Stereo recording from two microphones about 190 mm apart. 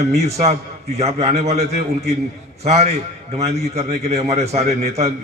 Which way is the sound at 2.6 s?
35° right (ahead or behind).